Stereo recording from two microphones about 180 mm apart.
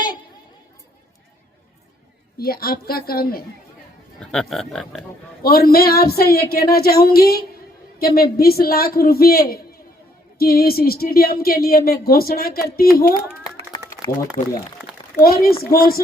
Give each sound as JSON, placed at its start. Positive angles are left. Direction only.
{"t": 2.4, "sound": "speech", "side_deg": 55}
{"t": 4.2, "sound": "speech", "side_deg": 5}
{"t": 5.4, "sound": "speech", "side_deg": 55}
{"t": 15.2, "sound": "speech", "side_deg": 55}